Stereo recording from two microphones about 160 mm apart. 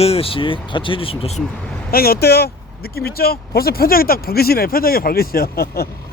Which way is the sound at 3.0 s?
70° left (ahead or behind).